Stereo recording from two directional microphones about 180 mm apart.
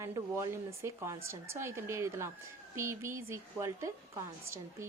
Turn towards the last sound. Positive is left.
turn(degrees=-15)  # may be behind; listen again after turning